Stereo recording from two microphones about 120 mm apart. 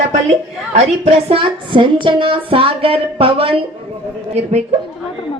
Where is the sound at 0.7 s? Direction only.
60° right (ahead or behind).